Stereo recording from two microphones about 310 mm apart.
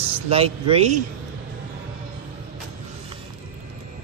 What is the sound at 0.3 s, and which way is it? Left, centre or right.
Speech, centre.